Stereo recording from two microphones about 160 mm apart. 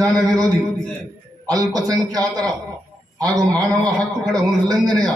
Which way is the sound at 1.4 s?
20° right (ahead or behind).